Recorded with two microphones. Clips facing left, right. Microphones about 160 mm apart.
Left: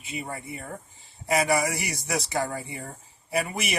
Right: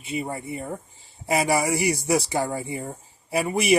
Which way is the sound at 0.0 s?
30° right (ahead or behind).